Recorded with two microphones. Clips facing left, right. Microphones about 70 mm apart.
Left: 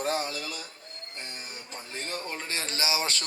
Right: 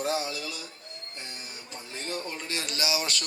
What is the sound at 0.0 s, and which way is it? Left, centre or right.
Speech, left.